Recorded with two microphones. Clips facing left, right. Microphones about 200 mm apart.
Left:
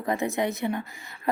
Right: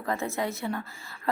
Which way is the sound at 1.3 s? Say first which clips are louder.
Left 2 dB; 20° left (ahead or behind).